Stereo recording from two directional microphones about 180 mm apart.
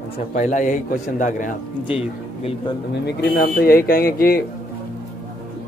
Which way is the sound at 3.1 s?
60° left (ahead or behind).